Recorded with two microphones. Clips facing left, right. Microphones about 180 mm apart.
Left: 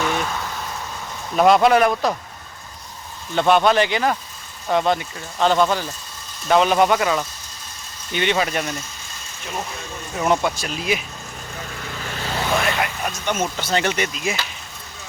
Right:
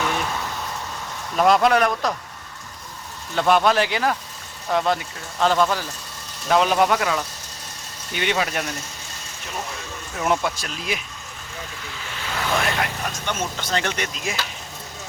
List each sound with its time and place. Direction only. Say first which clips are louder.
1.4 s speech: left 3 dB; centre (ahead or behind)
3.3 s speech: left 2 dB; centre (ahead or behind)
10.4 s speech: left 4 dB; centre (ahead or behind)
12.0 s vehicle: left 4 dB; 40° left (ahead or behind)
12.5 s speech: even; 5° left (ahead or behind)